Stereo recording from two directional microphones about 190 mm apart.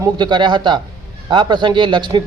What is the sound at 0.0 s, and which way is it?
A man's voice, 25° right (ahead or behind).